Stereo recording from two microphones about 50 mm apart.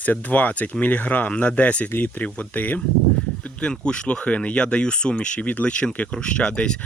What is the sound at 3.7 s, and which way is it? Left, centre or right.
Speech, centre.